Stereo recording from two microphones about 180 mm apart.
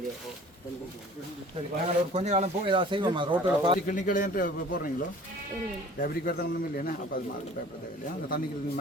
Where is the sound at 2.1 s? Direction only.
40° right (ahead or behind).